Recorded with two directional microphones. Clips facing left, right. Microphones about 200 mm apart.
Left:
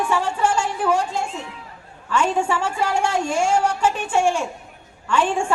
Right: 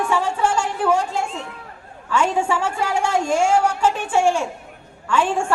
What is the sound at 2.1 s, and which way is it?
Speech, 10° right (ahead or behind).